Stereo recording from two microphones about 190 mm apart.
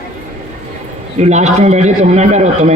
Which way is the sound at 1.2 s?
35° right (ahead or behind).